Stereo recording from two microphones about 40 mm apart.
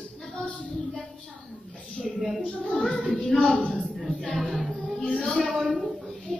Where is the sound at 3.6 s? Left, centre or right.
Left.